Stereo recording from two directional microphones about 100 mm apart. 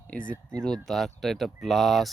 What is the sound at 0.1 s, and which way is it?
Speech, 10° left (ahead or behind).